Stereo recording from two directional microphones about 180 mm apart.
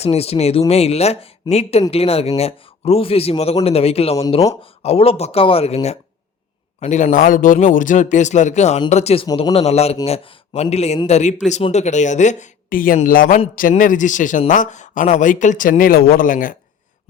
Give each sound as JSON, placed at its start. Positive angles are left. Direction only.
{"t": 0.0, "sound": "speech", "side_deg": 35}
{"t": 9.2, "sound": "speech", "side_deg": 25}